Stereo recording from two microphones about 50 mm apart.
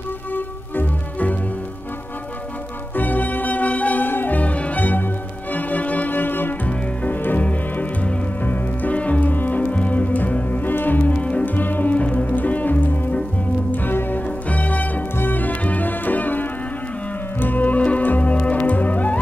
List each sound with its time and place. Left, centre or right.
0.3 s music: left
3.0 s music: left
11.0 s music: left
11.4 s music: left